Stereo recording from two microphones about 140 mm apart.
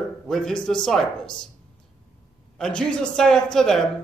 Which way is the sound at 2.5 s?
5° left (ahead or behind).